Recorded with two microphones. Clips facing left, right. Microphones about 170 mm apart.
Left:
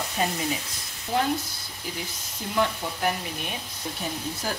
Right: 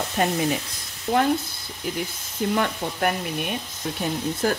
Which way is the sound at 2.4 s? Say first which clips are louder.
Right 11 dB; 65° right (ahead or behind).